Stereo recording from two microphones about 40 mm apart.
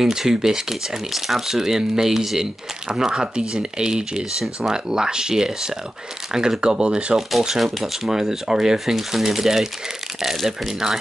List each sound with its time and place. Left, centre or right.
0.0 s speech: centre
7.2 s speech: centre
8.7 s speech: centre